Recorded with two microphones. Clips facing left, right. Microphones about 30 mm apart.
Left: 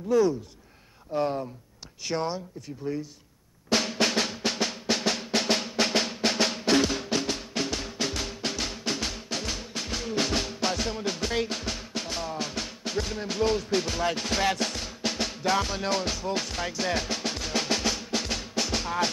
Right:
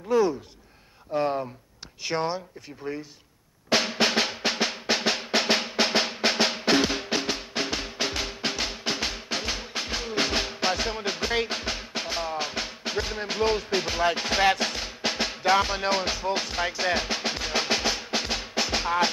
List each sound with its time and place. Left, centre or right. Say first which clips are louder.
0.1 s speech: even; centre
3.7 s drum: right 2 dB; centre